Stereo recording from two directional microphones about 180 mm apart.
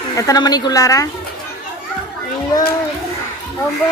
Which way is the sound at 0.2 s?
20° left (ahead or behind).